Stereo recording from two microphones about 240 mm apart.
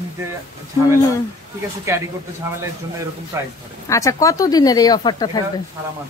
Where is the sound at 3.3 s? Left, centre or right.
Centre.